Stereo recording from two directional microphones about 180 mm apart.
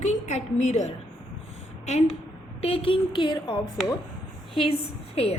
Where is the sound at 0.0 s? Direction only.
40° left (ahead or behind).